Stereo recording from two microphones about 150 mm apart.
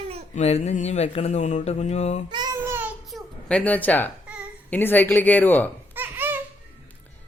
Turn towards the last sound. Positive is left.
turn(degrees=-15)  # may be behind; listen again after turning